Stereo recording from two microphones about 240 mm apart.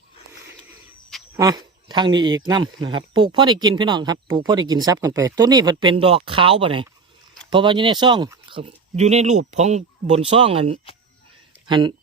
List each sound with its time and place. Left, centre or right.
1.4 s speech: centre